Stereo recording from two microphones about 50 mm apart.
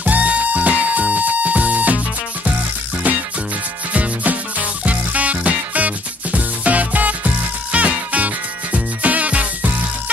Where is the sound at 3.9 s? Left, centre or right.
Right.